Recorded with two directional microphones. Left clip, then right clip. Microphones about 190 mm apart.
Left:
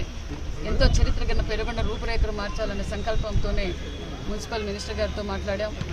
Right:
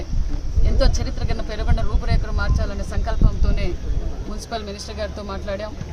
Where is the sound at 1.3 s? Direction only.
25° right (ahead or behind).